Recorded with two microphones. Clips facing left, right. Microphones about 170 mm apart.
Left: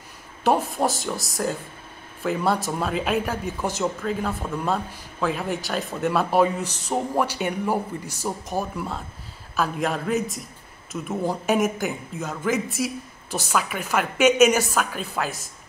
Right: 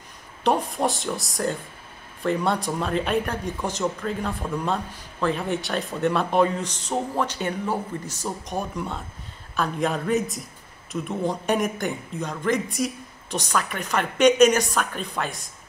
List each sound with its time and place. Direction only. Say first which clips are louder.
0.4 s speech: left 1 dB; 5° left (ahead or behind)